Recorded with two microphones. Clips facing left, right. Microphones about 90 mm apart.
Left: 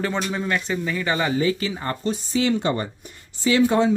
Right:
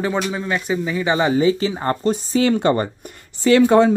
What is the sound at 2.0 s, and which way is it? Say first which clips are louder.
Speech: right 4 dB; 45° right (ahead or behind).